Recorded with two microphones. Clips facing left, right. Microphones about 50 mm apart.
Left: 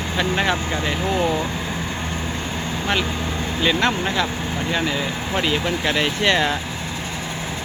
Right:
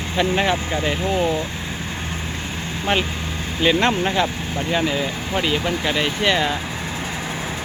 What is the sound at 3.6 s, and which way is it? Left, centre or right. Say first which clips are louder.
Speech: right 2 dB; centre.